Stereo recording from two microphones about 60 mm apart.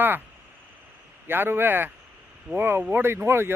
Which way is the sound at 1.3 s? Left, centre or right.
Right.